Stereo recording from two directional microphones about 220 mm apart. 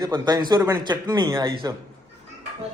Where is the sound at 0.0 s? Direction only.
20° right (ahead or behind).